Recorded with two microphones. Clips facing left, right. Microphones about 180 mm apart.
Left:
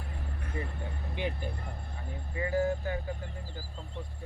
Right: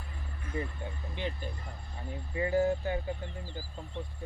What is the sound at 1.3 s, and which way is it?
Speech, 60° left (ahead or behind).